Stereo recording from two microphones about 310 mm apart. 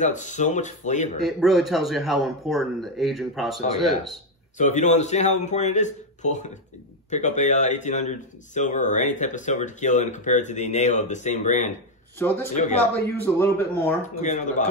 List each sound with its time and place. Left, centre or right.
0.0 s speech: left
1.2 s a man's voice: centre
4.6 s speech: left
12.2 s speech: centre
14.0 s speech: left